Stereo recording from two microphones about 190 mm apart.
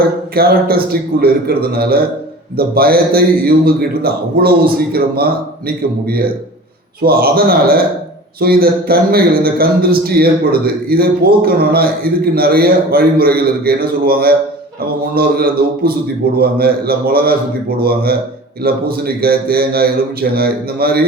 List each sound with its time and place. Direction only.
0.3 s a man's voice: 55° right (ahead or behind)